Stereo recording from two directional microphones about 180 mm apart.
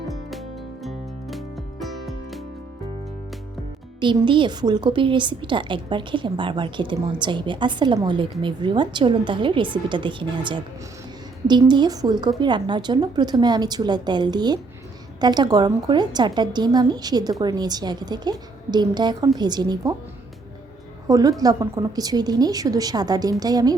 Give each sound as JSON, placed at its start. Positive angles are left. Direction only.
{"t": 0.3, "sound": "music", "side_deg": 0}
{"t": 4.0, "sound": "a woman's voice", "side_deg": -25}
{"t": 21.1, "sound": "a woman's voice", "side_deg": -20}